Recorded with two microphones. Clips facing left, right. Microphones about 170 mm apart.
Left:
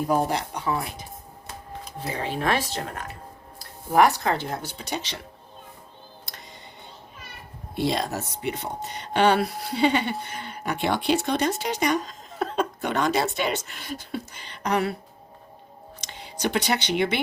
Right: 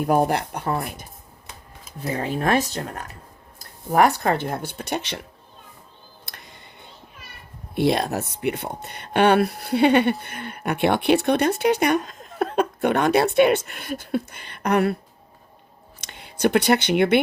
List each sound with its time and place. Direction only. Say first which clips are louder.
0.0 s speech: right 4 dB; 60° right (ahead or behind)
2.0 s speech: right 3 dB; 45° right (ahead or behind)
3.9 s speech: right 1 dB; 50° right (ahead or behind)
6.3 s music: right 1 dB; 60° right (ahead or behind)
7.8 s speech: right 5 dB; 60° right (ahead or behind)
16.0 s speech: right 7 dB; 55° right (ahead or behind)